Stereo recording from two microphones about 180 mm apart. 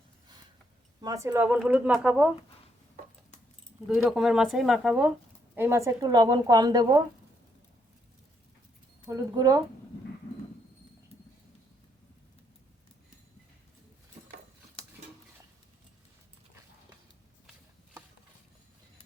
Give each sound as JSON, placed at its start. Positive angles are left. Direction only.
{"t": 1.0, "sound": "speech", "side_deg": -15}
{"t": 3.8, "sound": "speech", "side_deg": 0}
{"t": 5.5, "sound": "speech", "side_deg": -15}
{"t": 9.0, "sound": "speech", "side_deg": -20}